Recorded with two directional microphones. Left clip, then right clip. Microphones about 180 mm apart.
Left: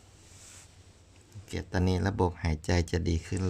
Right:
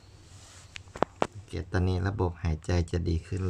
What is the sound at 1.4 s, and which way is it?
Speech, 25° left (ahead or behind).